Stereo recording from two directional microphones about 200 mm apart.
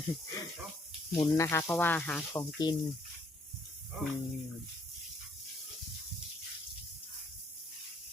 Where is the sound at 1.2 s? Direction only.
15° left (ahead or behind).